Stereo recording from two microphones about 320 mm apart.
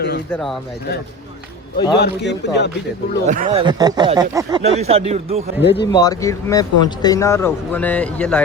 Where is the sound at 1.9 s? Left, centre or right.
Left.